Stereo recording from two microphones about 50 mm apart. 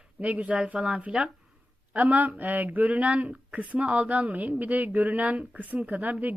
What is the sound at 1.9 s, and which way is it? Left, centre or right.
Speech, right.